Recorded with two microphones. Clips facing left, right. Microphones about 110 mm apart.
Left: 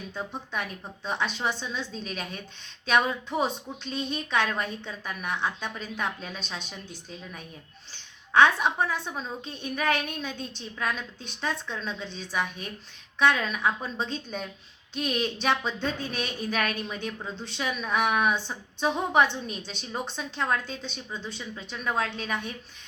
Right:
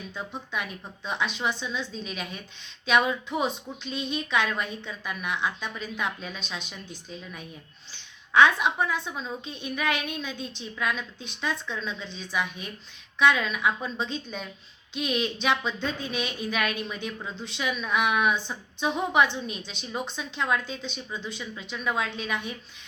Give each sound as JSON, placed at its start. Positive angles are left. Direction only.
{"t": 0.1, "sound": "a woman's voice", "side_deg": 35}
{"t": 8.8, "sound": "a woman's voice", "side_deg": 40}